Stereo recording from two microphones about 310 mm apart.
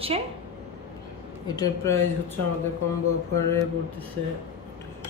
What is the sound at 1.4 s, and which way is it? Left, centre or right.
Speech, centre.